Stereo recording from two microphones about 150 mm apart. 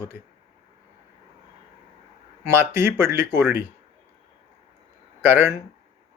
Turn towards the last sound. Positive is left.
turn(degrees=-15)  # may be behind; listen again after turning